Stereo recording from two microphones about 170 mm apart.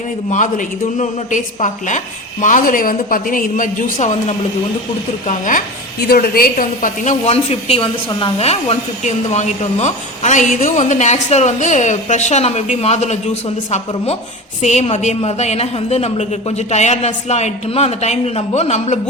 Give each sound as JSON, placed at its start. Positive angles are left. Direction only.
{"t": 0.3, "sound": "a woman's voice", "side_deg": 45}